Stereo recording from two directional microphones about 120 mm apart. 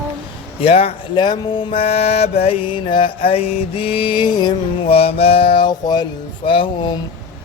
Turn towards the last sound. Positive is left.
turn(degrees=45)  # may be behind; listen again after turning